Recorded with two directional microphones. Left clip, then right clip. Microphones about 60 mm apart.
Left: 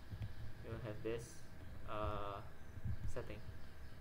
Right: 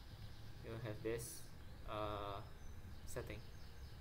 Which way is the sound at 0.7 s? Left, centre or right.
Centre.